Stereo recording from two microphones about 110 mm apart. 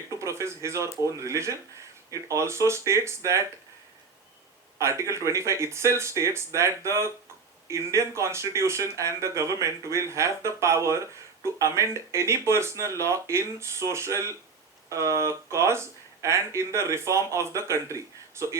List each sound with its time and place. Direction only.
0.1 s speech: 25° right (ahead or behind)
4.8 s speech: 25° right (ahead or behind)